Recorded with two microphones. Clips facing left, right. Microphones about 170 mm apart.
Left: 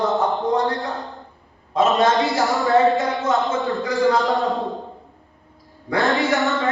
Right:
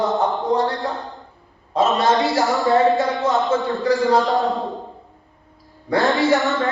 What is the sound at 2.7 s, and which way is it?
Mantra, centre (ahead or behind).